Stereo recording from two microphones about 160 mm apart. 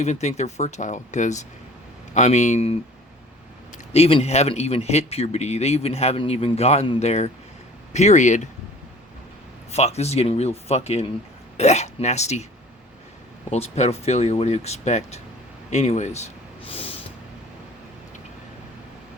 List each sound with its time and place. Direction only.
0.0 s speech: 45° left (ahead or behind)
3.9 s speech: 40° left (ahead or behind)
7.9 s speech: 45° left (ahead or behind)
9.7 s speech: 40° left (ahead or behind)
13.5 s speech: 40° left (ahead or behind)